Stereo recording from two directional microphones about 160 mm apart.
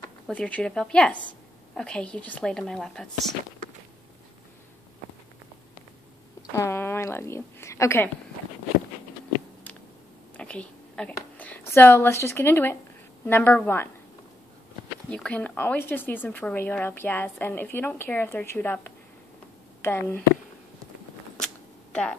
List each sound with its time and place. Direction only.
0.3 s speech: 10° left (ahead or behind)
6.5 s a woman's voice: 15° left (ahead or behind)
10.3 s a sound: 10° left (ahead or behind)
11.1 s speech: 10° left (ahead or behind)
15.0 s speech: 5° left (ahead or behind)